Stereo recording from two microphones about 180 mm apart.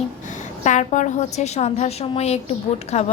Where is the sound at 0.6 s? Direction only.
40° left (ahead or behind).